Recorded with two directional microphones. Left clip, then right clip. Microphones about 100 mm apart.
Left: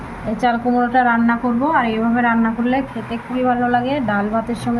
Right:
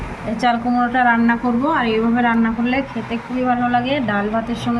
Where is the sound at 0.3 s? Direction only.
20° left (ahead or behind).